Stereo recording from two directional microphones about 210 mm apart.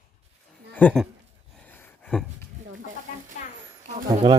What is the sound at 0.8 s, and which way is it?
Speech, 5° left (ahead or behind).